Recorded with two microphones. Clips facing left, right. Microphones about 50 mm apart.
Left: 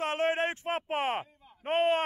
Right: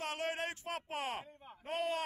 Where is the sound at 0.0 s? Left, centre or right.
Left.